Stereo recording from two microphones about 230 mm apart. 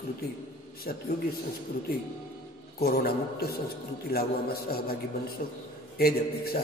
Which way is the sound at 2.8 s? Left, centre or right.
Left.